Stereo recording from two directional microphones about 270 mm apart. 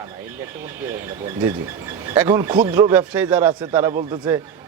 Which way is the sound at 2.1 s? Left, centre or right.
Centre.